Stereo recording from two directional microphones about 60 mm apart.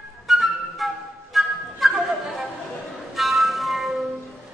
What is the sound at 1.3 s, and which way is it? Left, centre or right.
Music, centre.